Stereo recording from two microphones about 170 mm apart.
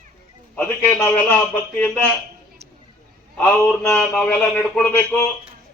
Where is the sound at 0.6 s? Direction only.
10° left (ahead or behind).